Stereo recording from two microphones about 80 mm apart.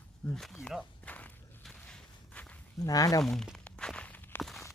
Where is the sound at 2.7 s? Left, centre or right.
Left.